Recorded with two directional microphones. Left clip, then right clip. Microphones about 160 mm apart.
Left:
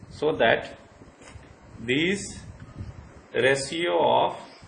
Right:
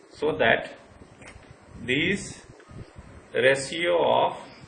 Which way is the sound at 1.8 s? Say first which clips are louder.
Even; 75° left (ahead or behind).